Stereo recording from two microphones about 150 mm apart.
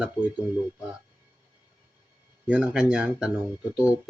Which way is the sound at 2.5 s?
5° right (ahead or behind).